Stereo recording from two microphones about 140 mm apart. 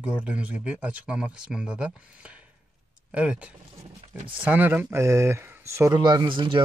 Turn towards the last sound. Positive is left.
turn(degrees=-35)  # may be behind; listen again after turning